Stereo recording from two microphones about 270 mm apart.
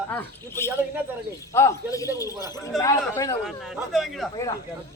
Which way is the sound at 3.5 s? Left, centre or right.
Centre.